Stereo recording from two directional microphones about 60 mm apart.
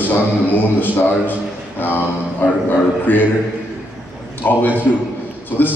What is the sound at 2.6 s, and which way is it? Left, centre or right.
Speech, left.